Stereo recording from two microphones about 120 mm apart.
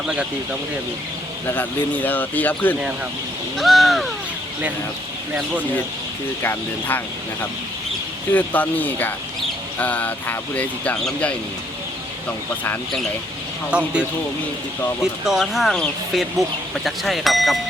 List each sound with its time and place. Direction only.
1.5 s speech: 15° left (ahead or behind)
3.6 s speech: centre (ahead or behind)
6.4 s speech: 15° left (ahead or behind)
8.3 s speech: 15° left (ahead or behind)
13.7 s speech: 10° right (ahead or behind)
15.3 s speech: centre (ahead or behind)